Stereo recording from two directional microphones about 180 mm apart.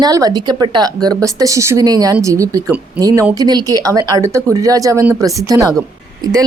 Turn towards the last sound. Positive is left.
turn(degrees=-20)  # may be behind; listen again after turning